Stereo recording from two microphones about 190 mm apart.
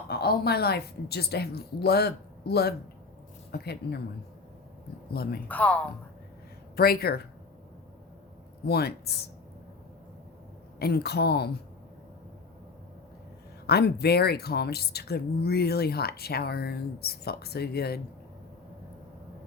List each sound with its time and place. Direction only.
0.1 s speech: 55° left (ahead or behind)
5.1 s speech: 55° left (ahead or behind)
5.5 s a woman's voice: 5° left (ahead or behind)
6.7 s speech: 55° left (ahead or behind)
8.6 s speech: 55° left (ahead or behind)
10.8 s speech: 55° left (ahead or behind)
13.7 s speech: 55° left (ahead or behind)